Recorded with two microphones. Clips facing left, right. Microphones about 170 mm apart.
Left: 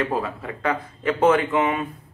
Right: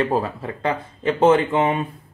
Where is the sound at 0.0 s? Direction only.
30° right (ahead or behind).